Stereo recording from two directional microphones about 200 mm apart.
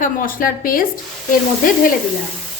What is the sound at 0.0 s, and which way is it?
A woman's voice, 45° left (ahead or behind).